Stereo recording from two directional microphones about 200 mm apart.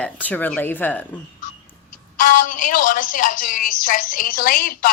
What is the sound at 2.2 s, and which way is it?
A woman's voice, 45° left (ahead or behind).